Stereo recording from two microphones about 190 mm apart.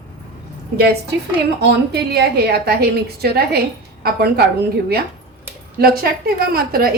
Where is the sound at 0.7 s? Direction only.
55° right (ahead or behind).